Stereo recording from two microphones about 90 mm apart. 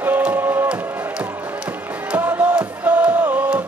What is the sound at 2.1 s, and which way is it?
Music, 20° right (ahead or behind).